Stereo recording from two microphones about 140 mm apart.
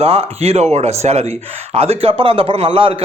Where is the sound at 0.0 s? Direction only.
45° right (ahead or behind).